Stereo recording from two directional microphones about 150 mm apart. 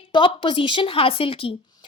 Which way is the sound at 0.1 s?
35° left (ahead or behind).